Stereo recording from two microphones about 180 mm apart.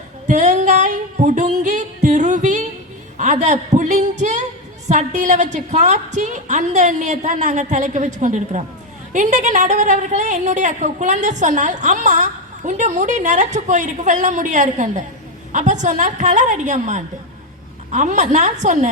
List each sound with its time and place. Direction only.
0.3 s singing: 40° right (ahead or behind)
3.2 s a man's voice: 40° right (ahead or behind)
4.2 s singing: 40° right (ahead or behind)
4.9 s a woman's voice: 40° right (ahead or behind)